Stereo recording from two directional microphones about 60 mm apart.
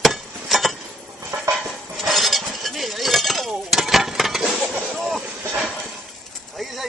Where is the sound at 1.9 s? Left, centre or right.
Centre.